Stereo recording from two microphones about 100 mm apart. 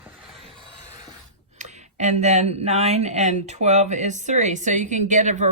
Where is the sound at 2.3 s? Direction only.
90° right.